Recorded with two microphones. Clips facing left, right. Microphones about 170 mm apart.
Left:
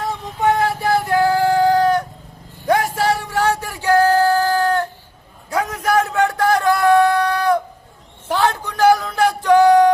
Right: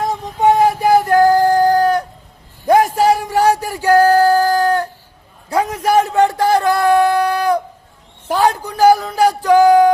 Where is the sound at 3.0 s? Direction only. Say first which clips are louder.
Right 5 dB; 15° right (ahead or behind).